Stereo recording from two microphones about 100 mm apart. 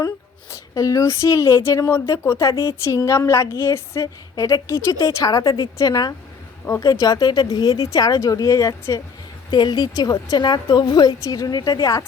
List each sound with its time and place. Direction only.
0.7 s speech: 35° left (ahead or behind)
9.5 s a woman's voice: 45° left (ahead or behind)